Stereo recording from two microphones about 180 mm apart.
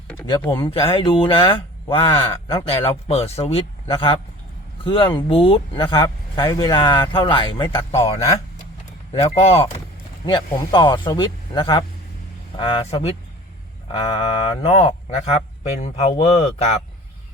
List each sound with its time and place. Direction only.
0.4 s speech: 25° left (ahead or behind)
10.2 s speech: 25° left (ahead or behind)